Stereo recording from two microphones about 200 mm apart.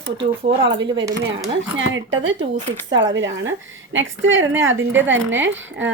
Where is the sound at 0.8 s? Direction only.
25° right (ahead or behind).